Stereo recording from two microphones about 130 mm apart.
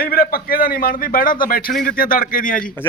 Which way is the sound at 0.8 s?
90° left.